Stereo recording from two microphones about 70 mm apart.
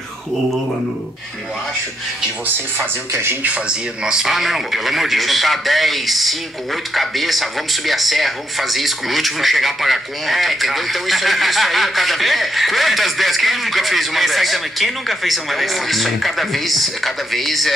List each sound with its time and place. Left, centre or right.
3.1 s speech: right
3.4 s speech: centre